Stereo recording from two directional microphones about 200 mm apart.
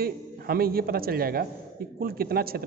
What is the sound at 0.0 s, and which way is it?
A man's voice, 50° right (ahead or behind).